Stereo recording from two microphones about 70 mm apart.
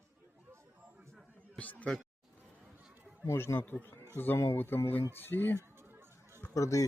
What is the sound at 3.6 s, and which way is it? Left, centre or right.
Speech, left.